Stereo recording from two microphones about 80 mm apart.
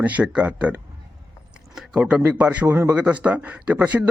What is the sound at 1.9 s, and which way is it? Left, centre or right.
Speech, centre.